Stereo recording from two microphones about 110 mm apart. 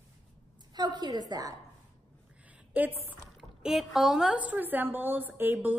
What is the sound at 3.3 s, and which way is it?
Speech, 5° right (ahead or behind).